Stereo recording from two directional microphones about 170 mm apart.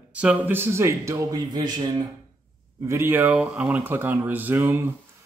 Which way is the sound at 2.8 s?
15° right (ahead or behind).